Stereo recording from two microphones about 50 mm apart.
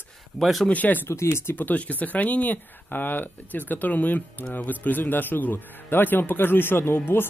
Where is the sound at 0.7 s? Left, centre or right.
Left.